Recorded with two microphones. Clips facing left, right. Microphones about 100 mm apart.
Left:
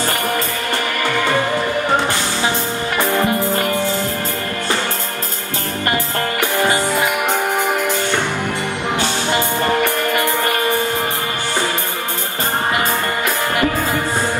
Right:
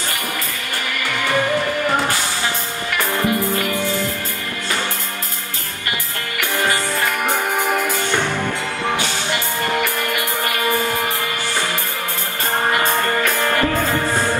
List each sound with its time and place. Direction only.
3.3 s music: 35° left (ahead or behind)
9.8 s music: 35° left (ahead or behind)
12.7 s music: 20° left (ahead or behind)